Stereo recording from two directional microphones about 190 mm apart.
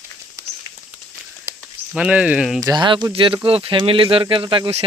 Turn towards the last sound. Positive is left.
turn(degrees=-30)  # may be behind; listen again after turning